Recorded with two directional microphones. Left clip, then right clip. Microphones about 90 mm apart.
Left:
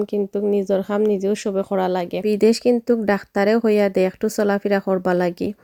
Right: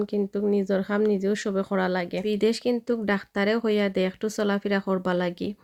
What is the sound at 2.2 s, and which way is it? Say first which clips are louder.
Speech: left 9 dB; 90° left.